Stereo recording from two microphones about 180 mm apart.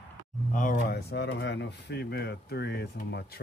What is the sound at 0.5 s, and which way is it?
Speech, 45° left (ahead or behind).